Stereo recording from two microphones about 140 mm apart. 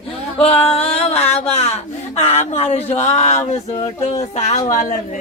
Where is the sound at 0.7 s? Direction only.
45° left (ahead or behind).